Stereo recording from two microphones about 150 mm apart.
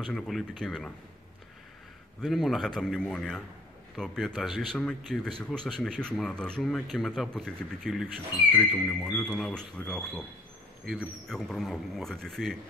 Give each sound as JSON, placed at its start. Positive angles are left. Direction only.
{"t": 0.0, "sound": "speech", "side_deg": 5}
{"t": 2.2, "sound": "speech", "side_deg": 0}
{"t": 9.1, "sound": "speech", "side_deg": 5}